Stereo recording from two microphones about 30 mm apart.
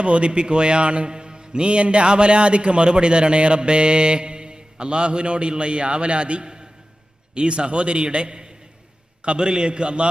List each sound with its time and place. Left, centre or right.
0.0 s a man's voice: right
1.1 s a man's voice: right